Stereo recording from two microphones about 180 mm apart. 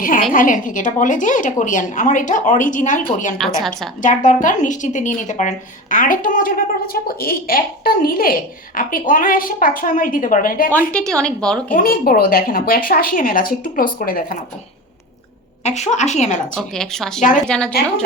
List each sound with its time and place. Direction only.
0.3 s a woman's voice: 45° left (ahead or behind)
3.3 s a woman's voice: centre (ahead or behind)
4.0 s a woman's voice: 45° left (ahead or behind)
10.9 s a woman's voice: 5° left (ahead or behind)
11.7 s a woman's voice: 55° left (ahead or behind)
15.6 s a woman's voice: 40° left (ahead or behind)
16.6 s a woman's voice: 5° left (ahead or behind)